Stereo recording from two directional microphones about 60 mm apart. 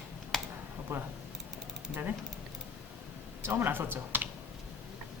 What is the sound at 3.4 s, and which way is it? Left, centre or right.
Speech, right.